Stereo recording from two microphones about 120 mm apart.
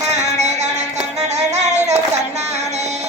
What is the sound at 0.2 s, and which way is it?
Music, 75° right (ahead or behind).